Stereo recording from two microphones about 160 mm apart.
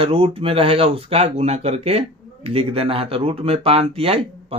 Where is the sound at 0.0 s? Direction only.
35° right (ahead or behind).